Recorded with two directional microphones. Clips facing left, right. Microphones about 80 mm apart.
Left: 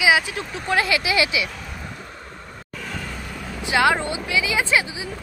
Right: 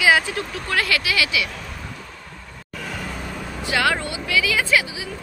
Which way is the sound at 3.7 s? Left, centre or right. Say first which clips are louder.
Left 3 dB; left.